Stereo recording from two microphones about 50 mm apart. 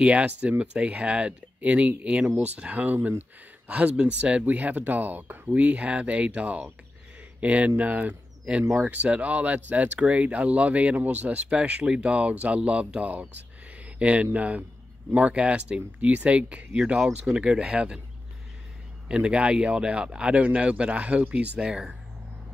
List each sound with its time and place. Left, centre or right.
0.0 s speech: right
3.7 s speech: right
5.5 s speech: right
19.0 s speech: right
21.6 s speech: centre